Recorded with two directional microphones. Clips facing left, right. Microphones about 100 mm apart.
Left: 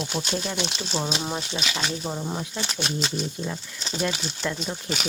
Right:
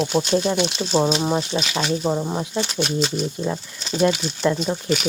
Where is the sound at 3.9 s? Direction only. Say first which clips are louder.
Right 9 dB; 30° right (ahead or behind).